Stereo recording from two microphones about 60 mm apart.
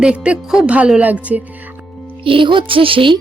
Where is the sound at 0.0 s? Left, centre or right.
Centre.